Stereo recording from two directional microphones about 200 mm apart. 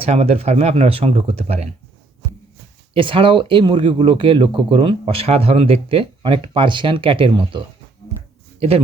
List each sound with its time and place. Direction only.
0.0 s speech: 30° right (ahead or behind)
2.9 s speech: 25° right (ahead or behind)